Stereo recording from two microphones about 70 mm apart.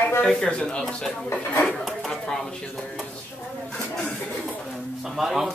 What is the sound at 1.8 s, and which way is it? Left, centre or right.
Speech, centre.